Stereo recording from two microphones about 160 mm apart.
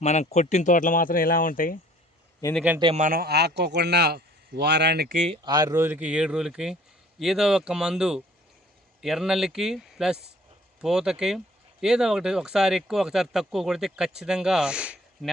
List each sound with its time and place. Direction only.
0.0 s speech: 45° left (ahead or behind); by 1.8 s 60° left (ahead or behind)
2.9 s speech: 55° right (ahead or behind); by 5.1 s 85° right
5.4 s speech: 25° right (ahead or behind); by 15.3 s 5° right (ahead or behind)